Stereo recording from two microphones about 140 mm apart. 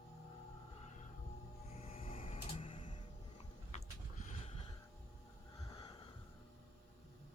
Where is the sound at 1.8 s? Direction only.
45° left (ahead or behind).